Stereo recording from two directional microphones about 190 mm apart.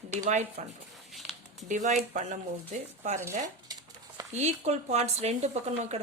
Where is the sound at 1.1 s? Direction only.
Centre (ahead or behind).